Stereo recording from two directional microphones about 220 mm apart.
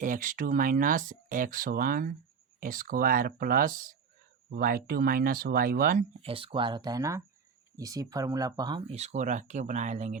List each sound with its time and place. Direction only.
0.0 s speech: 35° right (ahead or behind)
6.2 s speech: 25° right (ahead or behind)